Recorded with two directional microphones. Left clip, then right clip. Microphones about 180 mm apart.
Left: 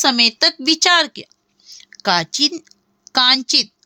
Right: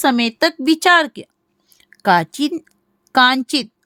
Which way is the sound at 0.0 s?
55° right (ahead or behind).